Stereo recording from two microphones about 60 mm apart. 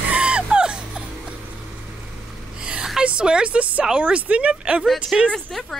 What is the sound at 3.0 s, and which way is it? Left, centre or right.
A woman's voice, centre.